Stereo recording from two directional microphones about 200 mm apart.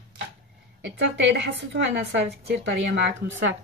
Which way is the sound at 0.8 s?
65° right (ahead or behind).